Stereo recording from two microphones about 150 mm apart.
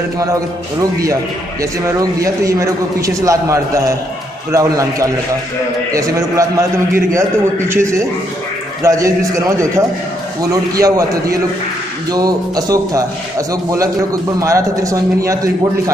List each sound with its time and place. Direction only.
1.6 s a man's voice: 20° right (ahead or behind)